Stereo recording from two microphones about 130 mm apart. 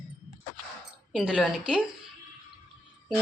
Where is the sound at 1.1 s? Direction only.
5° right (ahead or behind).